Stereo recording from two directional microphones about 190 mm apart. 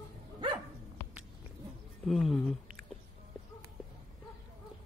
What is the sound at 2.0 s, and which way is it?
Speech, centre (ahead or behind).